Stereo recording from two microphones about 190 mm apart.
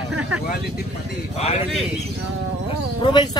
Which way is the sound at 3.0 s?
25° left (ahead or behind).